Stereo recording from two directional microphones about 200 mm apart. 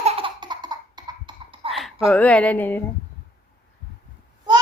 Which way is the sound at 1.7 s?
Centre (ahead or behind).